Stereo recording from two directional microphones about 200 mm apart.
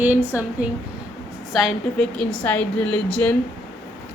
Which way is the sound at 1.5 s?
Centre (ahead or behind).